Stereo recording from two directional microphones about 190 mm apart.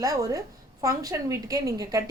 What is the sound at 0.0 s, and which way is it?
A woman's voice, 15° right (ahead or behind).